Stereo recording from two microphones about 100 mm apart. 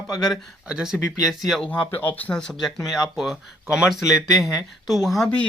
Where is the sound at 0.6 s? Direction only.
5° right (ahead or behind).